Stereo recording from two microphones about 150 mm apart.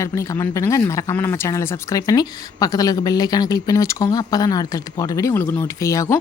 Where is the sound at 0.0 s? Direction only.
20° left (ahead or behind).